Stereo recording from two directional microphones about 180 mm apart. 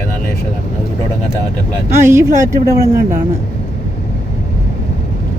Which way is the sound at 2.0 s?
15° right (ahead or behind).